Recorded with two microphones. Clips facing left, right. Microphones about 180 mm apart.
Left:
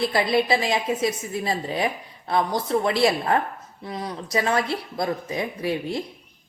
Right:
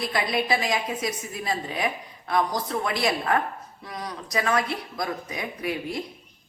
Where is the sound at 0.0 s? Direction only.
30° left (ahead or behind).